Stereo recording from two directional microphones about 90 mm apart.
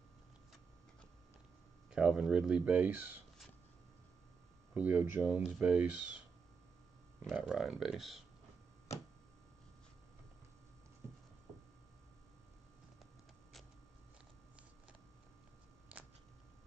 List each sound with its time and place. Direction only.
1.9 s speech: 10° right (ahead or behind)
4.7 s speech: 20° right (ahead or behind)
7.4 s speech: 5° right (ahead or behind)
11.0 s a sound: 30° right (ahead or behind)